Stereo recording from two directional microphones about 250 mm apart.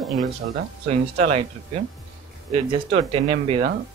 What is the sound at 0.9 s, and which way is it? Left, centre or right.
Speech, right.